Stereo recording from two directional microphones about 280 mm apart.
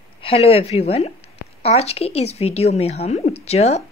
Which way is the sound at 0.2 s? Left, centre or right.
Centre.